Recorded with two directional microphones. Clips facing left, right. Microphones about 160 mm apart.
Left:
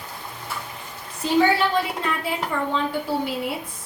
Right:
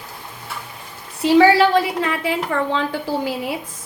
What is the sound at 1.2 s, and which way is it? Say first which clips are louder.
A woman's voice: right 7 dB; 85° right.